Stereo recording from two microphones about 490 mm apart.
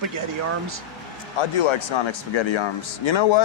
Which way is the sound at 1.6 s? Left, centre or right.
Left.